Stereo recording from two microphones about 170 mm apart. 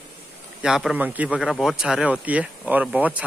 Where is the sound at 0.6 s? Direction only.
5° right (ahead or behind).